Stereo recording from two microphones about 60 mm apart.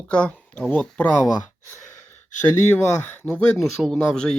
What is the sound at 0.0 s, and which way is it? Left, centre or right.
Speech, centre.